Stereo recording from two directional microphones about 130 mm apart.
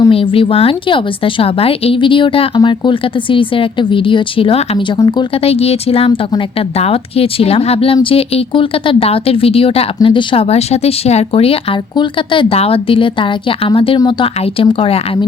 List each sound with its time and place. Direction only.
0.1 s a woman's voice: 45° left (ahead or behind)
4.9 s speech: 25° left (ahead or behind)
5.4 s speech: 50° left (ahead or behind)
11.9 s a woman's voice: 40° left (ahead or behind)